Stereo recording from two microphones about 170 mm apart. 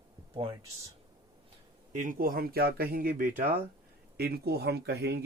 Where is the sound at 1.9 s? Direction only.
50° right (ahead or behind).